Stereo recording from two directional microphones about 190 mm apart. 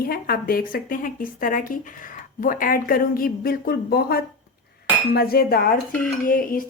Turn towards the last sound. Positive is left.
turn(degrees=45)  # may be behind; listen again after turning